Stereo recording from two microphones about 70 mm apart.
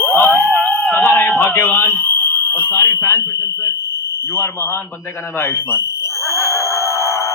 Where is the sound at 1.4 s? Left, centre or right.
Left.